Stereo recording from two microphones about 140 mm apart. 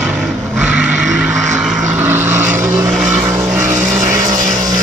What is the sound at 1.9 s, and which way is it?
Vehicle, 15° right (ahead or behind).